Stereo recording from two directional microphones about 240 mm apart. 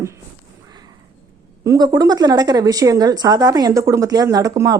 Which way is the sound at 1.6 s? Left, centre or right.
Centre.